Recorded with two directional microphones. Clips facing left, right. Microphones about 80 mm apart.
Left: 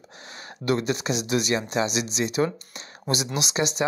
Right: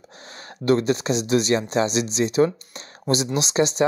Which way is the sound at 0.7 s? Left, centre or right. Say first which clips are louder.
Right 5 dB; right.